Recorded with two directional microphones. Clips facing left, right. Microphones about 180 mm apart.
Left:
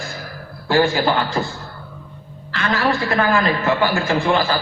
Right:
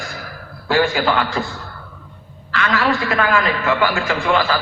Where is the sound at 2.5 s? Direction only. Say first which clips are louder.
Right 1 dB; 35° left (ahead or behind).